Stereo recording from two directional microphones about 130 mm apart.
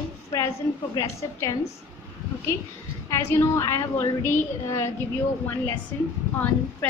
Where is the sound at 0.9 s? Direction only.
25° left (ahead or behind).